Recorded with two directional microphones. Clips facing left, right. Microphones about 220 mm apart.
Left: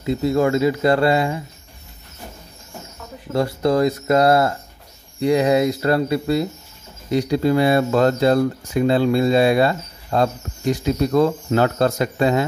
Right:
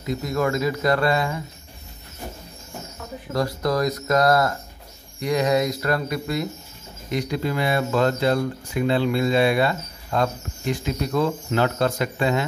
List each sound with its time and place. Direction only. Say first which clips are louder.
0.0 s speech: left 6 dB; 30° left (ahead or behind)
3.3 s speech: left 5 dB; 30° left (ahead or behind)